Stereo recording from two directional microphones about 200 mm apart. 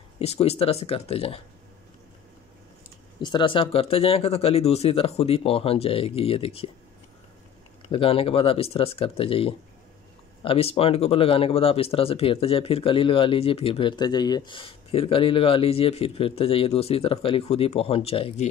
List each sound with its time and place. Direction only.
0.2 s speech: 30° left (ahead or behind)
3.2 s speech: 20° left (ahead or behind)
7.9 s speech: 25° left (ahead or behind)